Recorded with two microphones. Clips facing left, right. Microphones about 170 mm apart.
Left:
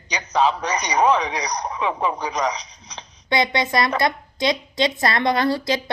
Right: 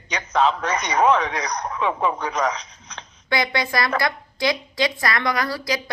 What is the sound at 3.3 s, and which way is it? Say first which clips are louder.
A woman's voice: left 3 dB; 20° left (ahead or behind).